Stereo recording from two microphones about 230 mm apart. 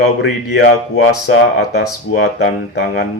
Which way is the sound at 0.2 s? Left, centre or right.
Left.